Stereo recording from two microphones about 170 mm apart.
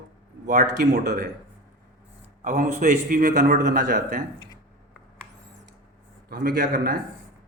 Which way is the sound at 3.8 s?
70° right (ahead or behind).